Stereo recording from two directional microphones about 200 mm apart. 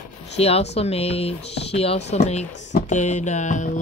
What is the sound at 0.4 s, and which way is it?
Speech, 30° left (ahead or behind).